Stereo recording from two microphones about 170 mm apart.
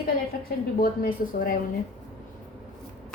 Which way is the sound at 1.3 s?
55° left (ahead or behind).